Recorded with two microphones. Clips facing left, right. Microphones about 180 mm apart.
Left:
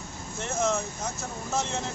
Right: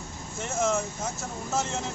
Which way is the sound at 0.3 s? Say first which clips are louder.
Right 1 dB; 5° right (ahead or behind).